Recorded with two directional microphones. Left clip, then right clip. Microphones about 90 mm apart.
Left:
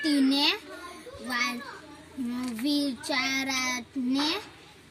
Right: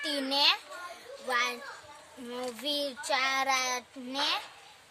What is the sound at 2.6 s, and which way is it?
A child's voice, 35° right (ahead or behind).